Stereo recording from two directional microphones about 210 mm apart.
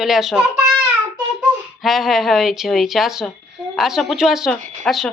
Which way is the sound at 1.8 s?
Centre (ahead or behind).